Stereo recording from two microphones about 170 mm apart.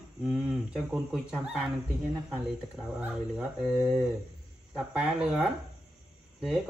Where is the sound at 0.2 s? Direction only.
5° right (ahead or behind).